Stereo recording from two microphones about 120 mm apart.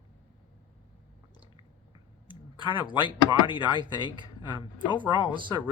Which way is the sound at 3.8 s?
40° right (ahead or behind).